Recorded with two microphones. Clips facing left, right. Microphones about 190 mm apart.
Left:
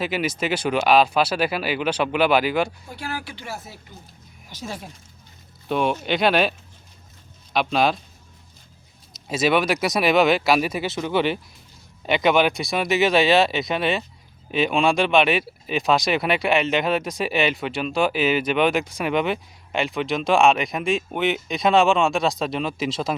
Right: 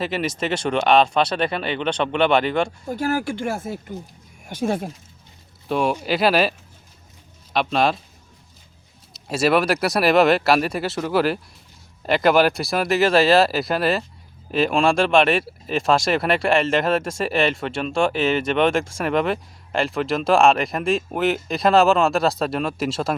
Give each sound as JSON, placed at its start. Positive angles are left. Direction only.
{"t": 0.0, "sound": "speech", "side_deg": 0}
{"t": 2.8, "sound": "speech", "side_deg": -45}
{"t": 5.6, "sound": "speech", "side_deg": 0}
{"t": 7.5, "sound": "speech", "side_deg": 0}
{"t": 9.1, "sound": "speech", "side_deg": 0}